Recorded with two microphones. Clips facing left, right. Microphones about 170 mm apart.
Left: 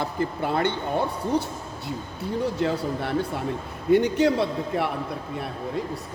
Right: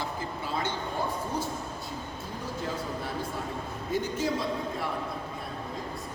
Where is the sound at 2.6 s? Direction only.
70° left (ahead or behind).